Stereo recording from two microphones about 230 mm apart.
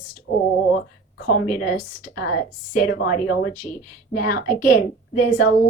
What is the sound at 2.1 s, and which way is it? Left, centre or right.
A woman's voice, left.